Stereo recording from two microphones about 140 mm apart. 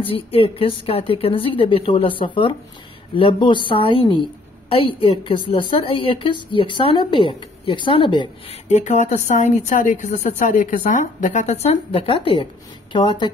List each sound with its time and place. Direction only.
0.0 s speech: 40° left (ahead or behind)
8.6 s a woman's voice: 55° left (ahead or behind); by 13.3 s 35° left (ahead or behind)